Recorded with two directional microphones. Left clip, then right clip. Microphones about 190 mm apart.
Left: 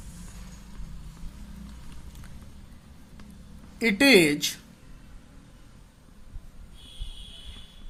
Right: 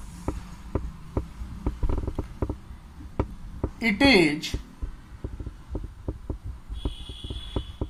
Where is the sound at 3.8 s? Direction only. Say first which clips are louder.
Left 1 dB; 40° left (ahead or behind).